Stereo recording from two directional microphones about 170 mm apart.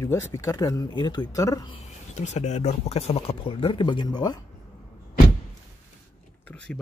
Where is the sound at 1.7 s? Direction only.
40° left (ahead or behind); by 4.4 s 25° left (ahead or behind).